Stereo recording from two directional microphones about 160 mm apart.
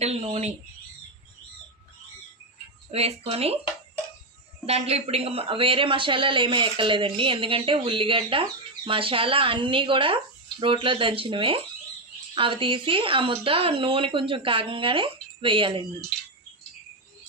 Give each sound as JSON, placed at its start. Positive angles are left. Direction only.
{"t": 0.0, "sound": "speech", "side_deg": -45}
{"t": 2.9, "sound": "speech", "side_deg": -40}
{"t": 4.6, "sound": "speech", "side_deg": -40}